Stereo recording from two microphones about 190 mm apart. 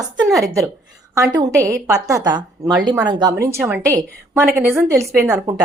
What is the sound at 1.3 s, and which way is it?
A woman's voice, 20° right (ahead or behind).